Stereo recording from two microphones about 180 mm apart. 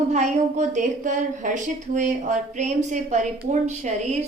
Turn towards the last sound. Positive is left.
turn(degrees=-40)  # may be behind; listen again after turning